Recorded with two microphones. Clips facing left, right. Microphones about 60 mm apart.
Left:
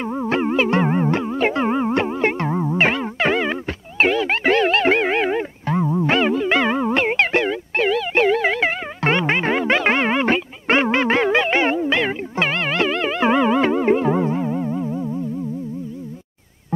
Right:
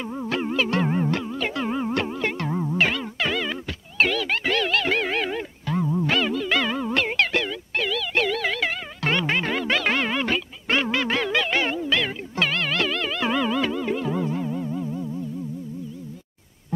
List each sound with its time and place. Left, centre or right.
0.0 s music: left